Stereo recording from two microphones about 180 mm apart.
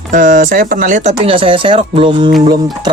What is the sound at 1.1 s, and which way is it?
Speech, 30° right (ahead or behind).